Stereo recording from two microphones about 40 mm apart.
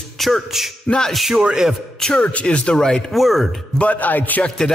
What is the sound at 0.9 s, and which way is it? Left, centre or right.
Speech, centre.